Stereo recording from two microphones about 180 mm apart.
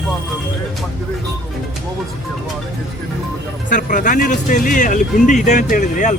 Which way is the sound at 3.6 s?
45° left (ahead or behind).